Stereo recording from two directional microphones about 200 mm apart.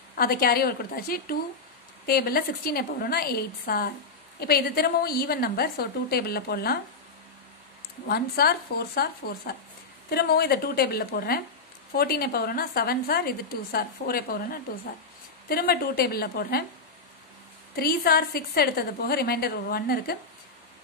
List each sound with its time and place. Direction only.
0.1 s a woman's voice: 50° left (ahead or behind)
8.1 s a woman's voice: 50° left (ahead or behind)
17.7 s a woman's voice: 50° left (ahead or behind)